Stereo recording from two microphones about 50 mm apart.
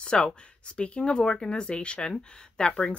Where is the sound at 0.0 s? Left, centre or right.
Centre.